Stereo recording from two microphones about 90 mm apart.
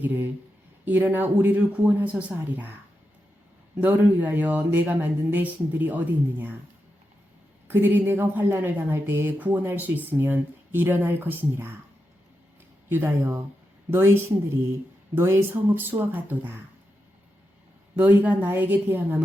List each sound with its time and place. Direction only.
0.0 s a woman's voice: 20° right (ahead or behind)
3.8 s a woman's voice: 20° right (ahead or behind)
7.7 s a woman's voice: 25° right (ahead or behind)
12.9 s a woman's voice: 30° right (ahead or behind)
17.9 s a woman's voice: 20° right (ahead or behind)